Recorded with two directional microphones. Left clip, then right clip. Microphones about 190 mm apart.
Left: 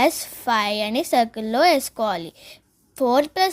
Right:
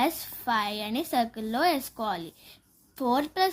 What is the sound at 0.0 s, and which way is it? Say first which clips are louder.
Speech: left 8 dB; 30° left (ahead or behind).